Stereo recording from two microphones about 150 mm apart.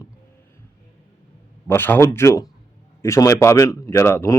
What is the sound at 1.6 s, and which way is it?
A man's voice, 15° left (ahead or behind).